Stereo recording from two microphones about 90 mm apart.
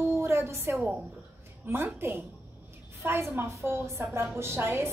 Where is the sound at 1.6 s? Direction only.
25° right (ahead or behind).